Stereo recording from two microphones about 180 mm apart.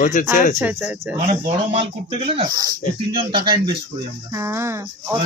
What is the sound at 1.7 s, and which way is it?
Speech, 30° right (ahead or behind).